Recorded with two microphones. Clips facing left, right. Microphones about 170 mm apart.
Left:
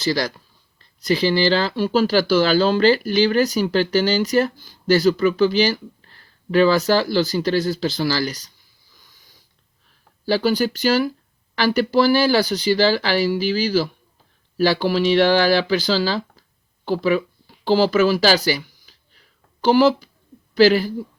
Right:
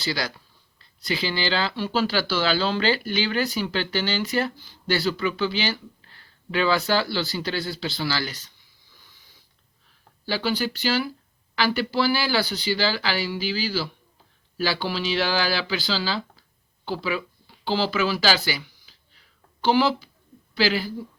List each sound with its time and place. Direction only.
1.0 s speech: 40° left (ahead or behind)
10.2 s speech: 45° left (ahead or behind)
16.8 s a sound: 45° left (ahead or behind)
19.6 s speech: 45° left (ahead or behind)